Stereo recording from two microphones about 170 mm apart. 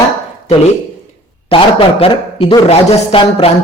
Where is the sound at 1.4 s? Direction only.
35° left (ahead or behind).